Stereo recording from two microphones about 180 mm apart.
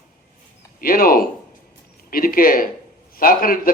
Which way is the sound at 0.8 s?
55° left (ahead or behind).